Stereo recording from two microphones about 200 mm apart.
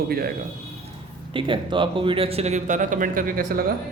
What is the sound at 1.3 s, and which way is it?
A man's voice, 25° right (ahead or behind).